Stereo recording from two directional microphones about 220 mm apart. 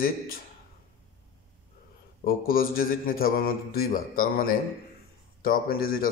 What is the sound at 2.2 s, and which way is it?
A man's voice, 40° left (ahead or behind).